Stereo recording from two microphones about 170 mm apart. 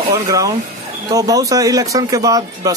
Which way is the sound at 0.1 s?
20° right (ahead or behind).